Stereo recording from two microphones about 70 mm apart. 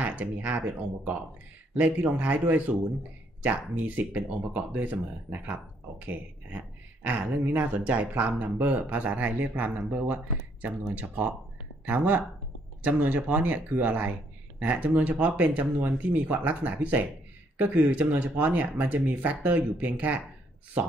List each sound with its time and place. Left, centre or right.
0.0 s speech: right